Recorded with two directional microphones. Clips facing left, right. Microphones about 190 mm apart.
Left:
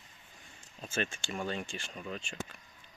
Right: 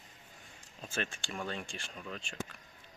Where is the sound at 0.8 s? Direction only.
Centre (ahead or behind).